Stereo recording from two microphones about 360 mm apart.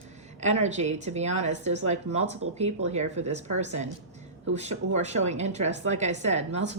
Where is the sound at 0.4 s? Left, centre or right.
Centre.